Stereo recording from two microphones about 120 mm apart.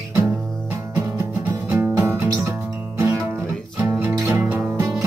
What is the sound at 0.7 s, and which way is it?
Music, 20° right (ahead or behind).